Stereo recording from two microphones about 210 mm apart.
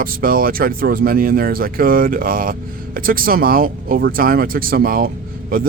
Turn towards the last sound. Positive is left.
turn(degrees=-45)  # may be behind; listen again after turning